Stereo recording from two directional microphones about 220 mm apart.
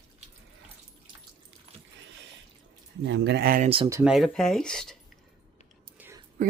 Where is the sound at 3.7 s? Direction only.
25° right (ahead or behind).